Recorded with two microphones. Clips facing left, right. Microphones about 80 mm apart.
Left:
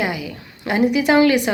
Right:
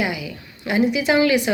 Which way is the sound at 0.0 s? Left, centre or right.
Left.